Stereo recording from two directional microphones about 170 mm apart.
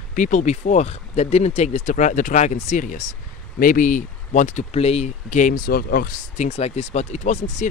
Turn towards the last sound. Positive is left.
turn(degrees=40)  # may be behind; listen again after turning